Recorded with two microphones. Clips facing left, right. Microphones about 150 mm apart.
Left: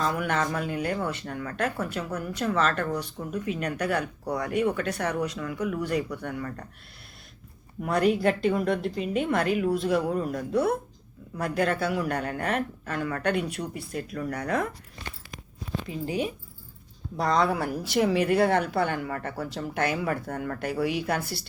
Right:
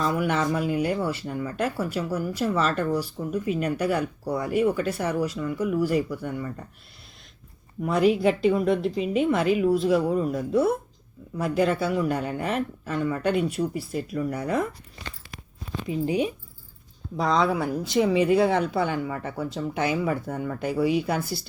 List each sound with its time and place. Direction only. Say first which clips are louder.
0.0 s speech: right 3 dB; 5° right (ahead or behind)
7.8 s speech: right 2 dB; centre (ahead or behind)
15.9 s speech: right 6 dB; 20° right (ahead or behind)
17.2 s speech: right 1 dB; centre (ahead or behind)